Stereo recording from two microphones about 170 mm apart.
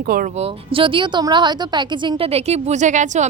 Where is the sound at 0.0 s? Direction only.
55° right (ahead or behind).